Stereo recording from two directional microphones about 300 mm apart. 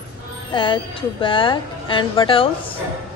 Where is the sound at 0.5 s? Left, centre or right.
Centre.